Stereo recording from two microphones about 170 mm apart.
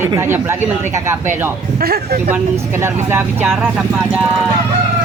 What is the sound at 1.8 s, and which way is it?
Speech, 65° right (ahead or behind).